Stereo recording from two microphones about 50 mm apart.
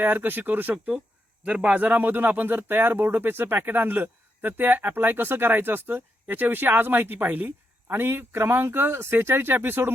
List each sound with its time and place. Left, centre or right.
0.0 s speech: right
1.5 s speech: right
7.9 s speech: right